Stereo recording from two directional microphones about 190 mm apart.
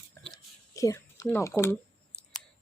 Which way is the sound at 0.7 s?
15° left (ahead or behind).